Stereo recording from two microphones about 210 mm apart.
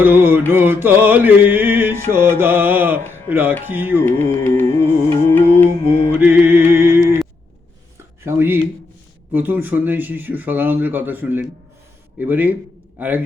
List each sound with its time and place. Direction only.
0.0 s music: 10° right (ahead or behind)
4.0 s carnatic music: 10° left (ahead or behind)
4.7 s music: 30° right (ahead or behind)
5.2 s carnatic music: 10° left (ahead or behind)
6.1 s music: 10° right (ahead or behind)
8.2 s a sound: 10° right (ahead or behind)
9.3 s music: 10° right (ahead or behind)